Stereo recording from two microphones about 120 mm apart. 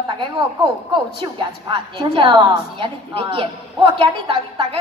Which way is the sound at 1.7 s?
45° right (ahead or behind).